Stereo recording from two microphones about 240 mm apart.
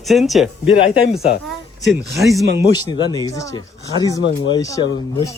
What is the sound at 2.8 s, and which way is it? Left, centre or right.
Speech, centre.